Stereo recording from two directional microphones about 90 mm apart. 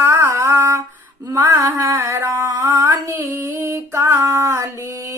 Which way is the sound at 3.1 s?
30° right (ahead or behind).